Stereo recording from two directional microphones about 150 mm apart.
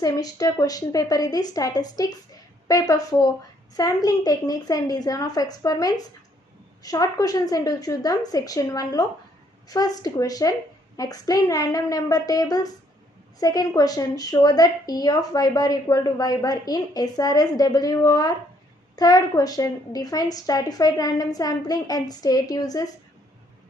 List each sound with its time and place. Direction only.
0.0 s speech: 25° left (ahead or behind)